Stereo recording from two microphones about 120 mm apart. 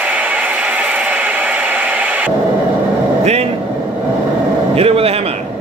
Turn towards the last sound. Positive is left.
turn(degrees=-55)  # may be behind; listen again after turning